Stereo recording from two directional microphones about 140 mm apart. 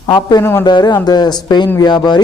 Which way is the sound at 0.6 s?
30° left (ahead or behind).